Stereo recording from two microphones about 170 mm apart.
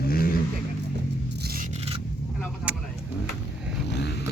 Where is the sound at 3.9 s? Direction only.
85° left.